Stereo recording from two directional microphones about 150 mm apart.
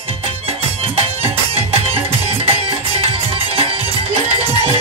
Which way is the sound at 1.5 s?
40° right (ahead or behind).